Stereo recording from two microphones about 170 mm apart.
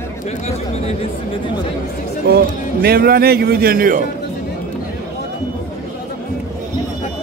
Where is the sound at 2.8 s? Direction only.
65° right (ahead or behind).